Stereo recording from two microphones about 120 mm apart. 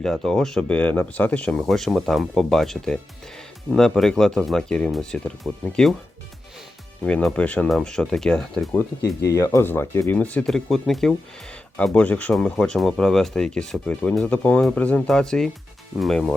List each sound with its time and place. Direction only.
0.0 s speech: 5° left (ahead or behind)
7.0 s speech: 10° left (ahead or behind)
8.7 s speech: 25° left (ahead or behind); by 16.3 s centre (ahead or behind)